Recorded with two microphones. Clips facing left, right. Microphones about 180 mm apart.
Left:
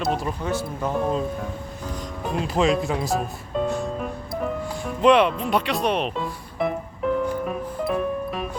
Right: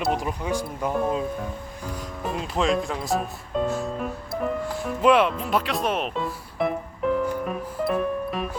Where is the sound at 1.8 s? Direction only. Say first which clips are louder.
Even; 5° right (ahead or behind).